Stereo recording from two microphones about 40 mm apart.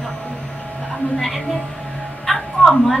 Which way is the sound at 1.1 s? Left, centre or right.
Centre.